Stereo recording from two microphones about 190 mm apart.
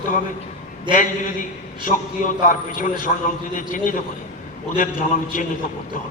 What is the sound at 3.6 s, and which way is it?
A man's voice, 45° left (ahead or behind).